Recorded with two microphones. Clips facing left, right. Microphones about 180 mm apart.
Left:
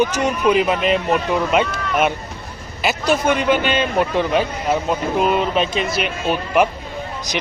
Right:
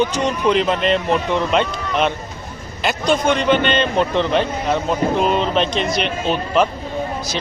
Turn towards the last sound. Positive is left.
turn(degrees=10)  # may be behind; listen again after turning